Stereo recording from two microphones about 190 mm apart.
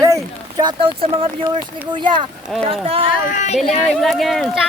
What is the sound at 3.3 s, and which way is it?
Speech, 40° left (ahead or behind).